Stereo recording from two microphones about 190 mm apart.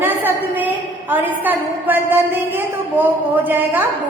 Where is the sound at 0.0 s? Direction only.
10° right (ahead or behind).